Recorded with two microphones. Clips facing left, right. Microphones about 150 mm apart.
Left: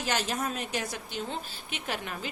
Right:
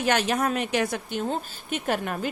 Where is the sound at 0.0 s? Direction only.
65° right (ahead or behind).